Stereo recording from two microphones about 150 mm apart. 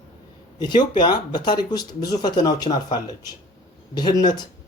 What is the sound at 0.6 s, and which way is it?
Speech, 30° left (ahead or behind).